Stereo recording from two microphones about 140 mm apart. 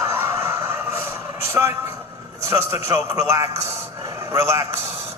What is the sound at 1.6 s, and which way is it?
A man's voice, 20° right (ahead or behind).